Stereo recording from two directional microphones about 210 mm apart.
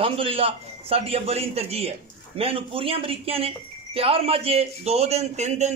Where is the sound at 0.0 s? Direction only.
25° right (ahead or behind).